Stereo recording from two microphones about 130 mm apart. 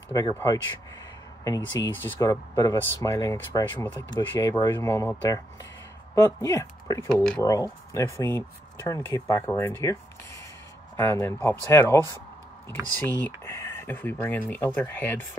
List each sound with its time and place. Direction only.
0.1 s speech: 30° left (ahead or behind)
4.1 s speech: 30° left (ahead or behind)
11.0 s speech: 20° left (ahead or behind)